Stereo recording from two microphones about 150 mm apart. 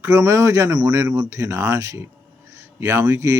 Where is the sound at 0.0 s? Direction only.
20° right (ahead or behind).